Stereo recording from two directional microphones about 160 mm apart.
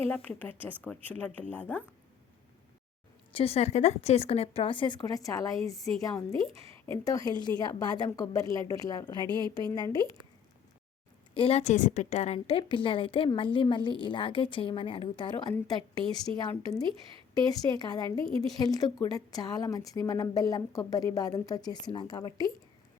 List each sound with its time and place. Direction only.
0.4 s speech: 10° left (ahead or behind)
3.3 s a woman's voice: 40° left (ahead or behind); by 9.2 s 25° left (ahead or behind)
9.2 s a woman's voice: 30° right (ahead or behind)
9.6 s a woman's voice: 25° left (ahead or behind)
11.3 s a woman's voice: 40° left (ahead or behind)